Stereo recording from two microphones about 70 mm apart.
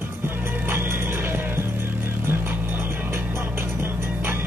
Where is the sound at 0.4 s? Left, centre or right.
Right.